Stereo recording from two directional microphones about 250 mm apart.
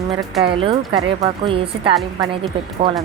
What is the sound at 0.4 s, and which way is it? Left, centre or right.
A woman's voice, right.